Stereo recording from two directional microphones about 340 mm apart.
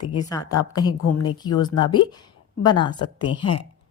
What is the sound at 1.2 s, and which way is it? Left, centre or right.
A woman's voice, centre.